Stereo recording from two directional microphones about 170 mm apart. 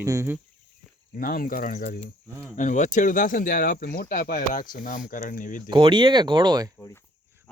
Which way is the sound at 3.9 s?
65° left (ahead or behind).